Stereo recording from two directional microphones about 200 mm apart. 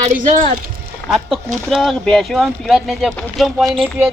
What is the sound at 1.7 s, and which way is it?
Speech, centre (ahead or behind).